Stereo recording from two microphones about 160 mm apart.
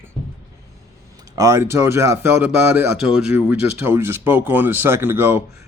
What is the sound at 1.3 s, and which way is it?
Speech, 20° right (ahead or behind).